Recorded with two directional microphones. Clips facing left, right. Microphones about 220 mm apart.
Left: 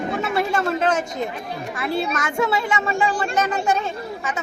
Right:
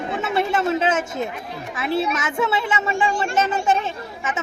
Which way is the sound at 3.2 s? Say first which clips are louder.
Right 1 dB; 25° right (ahead or behind).